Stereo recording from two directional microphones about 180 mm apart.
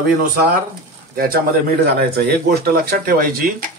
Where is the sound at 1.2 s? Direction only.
55° right (ahead or behind).